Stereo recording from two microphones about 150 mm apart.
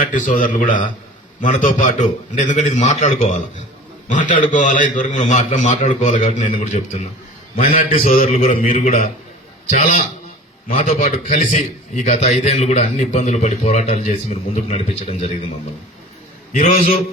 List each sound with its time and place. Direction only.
0.0 s a man's voice: 60° left (ahead or behind)
16.5 s a man's voice: 60° left (ahead or behind)